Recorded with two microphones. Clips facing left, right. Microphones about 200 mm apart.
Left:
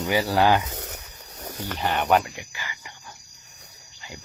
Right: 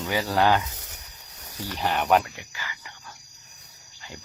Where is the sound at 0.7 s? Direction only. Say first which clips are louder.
Left 10 dB; 65° left (ahead or behind).